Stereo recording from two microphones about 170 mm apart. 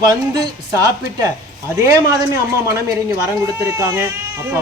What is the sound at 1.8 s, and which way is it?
Speech, 15° right (ahead or behind).